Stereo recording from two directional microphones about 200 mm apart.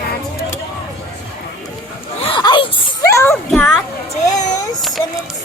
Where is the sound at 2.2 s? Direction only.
25° left (ahead or behind).